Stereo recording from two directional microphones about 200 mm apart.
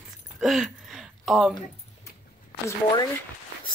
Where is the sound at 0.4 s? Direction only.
Centre (ahead or behind).